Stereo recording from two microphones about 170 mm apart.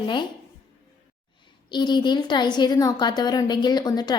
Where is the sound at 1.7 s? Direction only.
25° left (ahead or behind).